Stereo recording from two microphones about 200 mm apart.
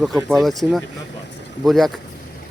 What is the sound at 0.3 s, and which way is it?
Speech, centre (ahead or behind).